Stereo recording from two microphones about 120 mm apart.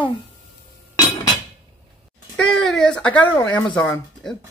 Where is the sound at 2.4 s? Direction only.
5° left (ahead or behind).